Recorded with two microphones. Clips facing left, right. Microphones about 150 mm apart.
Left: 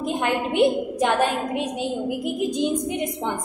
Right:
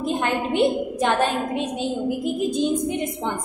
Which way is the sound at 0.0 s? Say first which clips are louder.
Even; 15° left (ahead or behind).